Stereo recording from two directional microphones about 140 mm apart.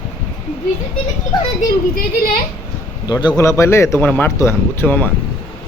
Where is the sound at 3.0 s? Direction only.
30° left (ahead or behind); by 5.1 s 15° left (ahead or behind).